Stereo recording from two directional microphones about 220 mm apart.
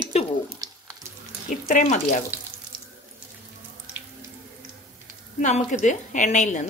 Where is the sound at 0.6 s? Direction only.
15° right (ahead or behind).